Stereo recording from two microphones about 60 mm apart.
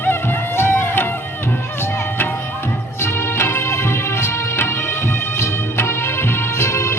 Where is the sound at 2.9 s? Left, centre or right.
Left.